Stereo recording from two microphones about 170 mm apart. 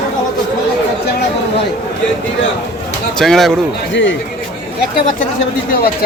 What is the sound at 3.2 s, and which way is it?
Speech, centre (ahead or behind).